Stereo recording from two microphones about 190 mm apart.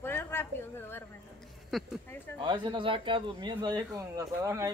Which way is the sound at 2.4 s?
25° right (ahead or behind).